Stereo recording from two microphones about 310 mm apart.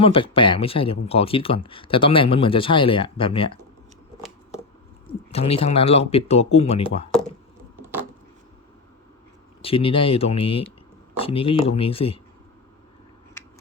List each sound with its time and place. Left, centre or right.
0.0 s speech: centre
5.3 s speech: centre
7.1 s a sound: centre
9.6 s speech: centre